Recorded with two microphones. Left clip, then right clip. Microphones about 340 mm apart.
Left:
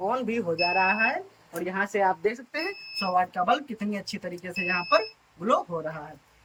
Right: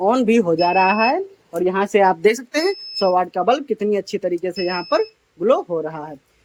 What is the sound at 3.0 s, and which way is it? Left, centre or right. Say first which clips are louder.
Speech: right 7 dB; centre.